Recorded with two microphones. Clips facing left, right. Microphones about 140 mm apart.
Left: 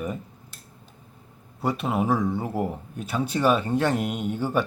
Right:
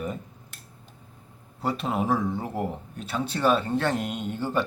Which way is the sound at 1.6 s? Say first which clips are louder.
Left 2 dB; 5° left (ahead or behind).